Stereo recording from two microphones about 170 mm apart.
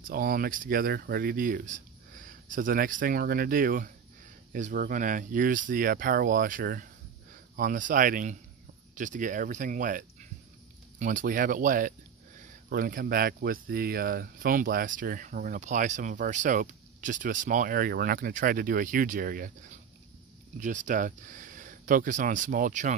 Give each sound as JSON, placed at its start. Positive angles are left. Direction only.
{"t": 0.1, "sound": "speech", "side_deg": -60}